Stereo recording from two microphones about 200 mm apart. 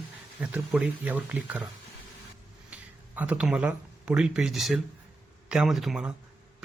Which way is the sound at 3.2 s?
5° right (ahead or behind).